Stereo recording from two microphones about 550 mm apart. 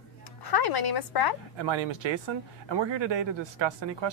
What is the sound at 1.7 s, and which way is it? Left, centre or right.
Speech, right.